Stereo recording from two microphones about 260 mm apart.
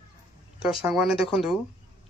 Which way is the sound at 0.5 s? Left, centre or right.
Centre.